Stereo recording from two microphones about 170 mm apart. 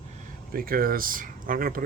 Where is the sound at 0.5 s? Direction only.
60° right (ahead or behind).